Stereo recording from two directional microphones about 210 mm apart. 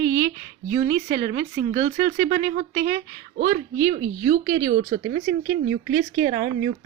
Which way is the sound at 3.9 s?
30° right (ahead or behind).